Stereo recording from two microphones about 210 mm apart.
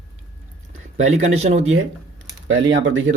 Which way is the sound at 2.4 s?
65° right (ahead or behind).